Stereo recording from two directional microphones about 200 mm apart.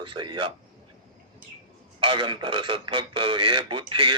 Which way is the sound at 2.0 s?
25° right (ahead or behind).